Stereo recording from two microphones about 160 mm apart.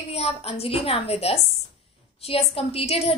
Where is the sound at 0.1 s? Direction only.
40° left (ahead or behind).